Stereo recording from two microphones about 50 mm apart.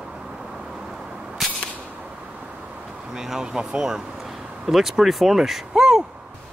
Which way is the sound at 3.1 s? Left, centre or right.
Centre.